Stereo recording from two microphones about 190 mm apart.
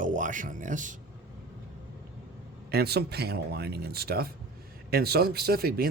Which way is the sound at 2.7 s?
55° right (ahead or behind).